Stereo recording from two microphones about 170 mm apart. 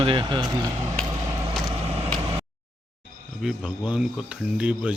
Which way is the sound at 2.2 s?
30° right (ahead or behind).